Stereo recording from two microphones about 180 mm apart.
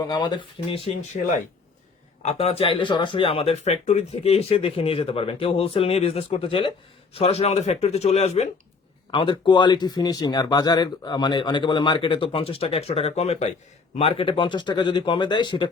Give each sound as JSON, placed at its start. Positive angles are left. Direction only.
{"t": 0.0, "sound": "speech", "side_deg": 25}
{"t": 2.2, "sound": "speech", "side_deg": 30}